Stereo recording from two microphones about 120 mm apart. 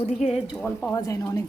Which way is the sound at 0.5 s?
15° left (ahead or behind).